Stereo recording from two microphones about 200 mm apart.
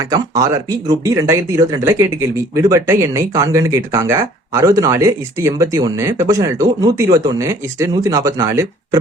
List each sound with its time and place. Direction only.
0.1 s speech: 15° right (ahead or behind)